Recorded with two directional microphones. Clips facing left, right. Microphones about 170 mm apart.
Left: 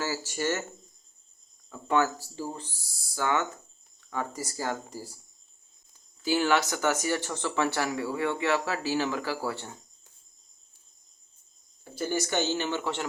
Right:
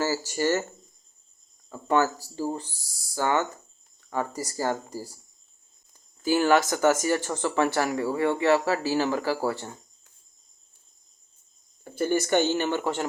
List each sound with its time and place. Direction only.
0.0 s a sound: 40° right (ahead or behind)
1.7 s speech: 40° right (ahead or behind)
6.2 s speech: 45° right (ahead or behind)
11.9 s speech: 55° right (ahead or behind)